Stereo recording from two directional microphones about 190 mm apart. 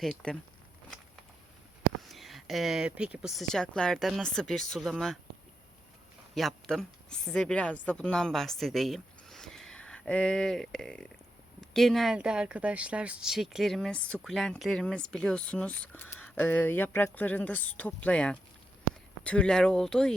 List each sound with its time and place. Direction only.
0.0 s speech: 5° left (ahead or behind)
2.0 s speech: centre (ahead or behind)
6.3 s a woman's voice: centre (ahead or behind)